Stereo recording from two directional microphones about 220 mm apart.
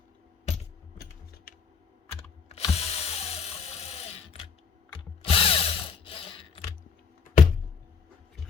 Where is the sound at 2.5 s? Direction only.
25° left (ahead or behind).